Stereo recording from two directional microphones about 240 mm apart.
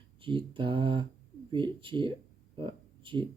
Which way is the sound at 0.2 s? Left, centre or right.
Right.